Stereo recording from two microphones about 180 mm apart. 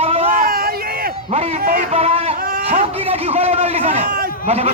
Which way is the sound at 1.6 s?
45° right (ahead or behind).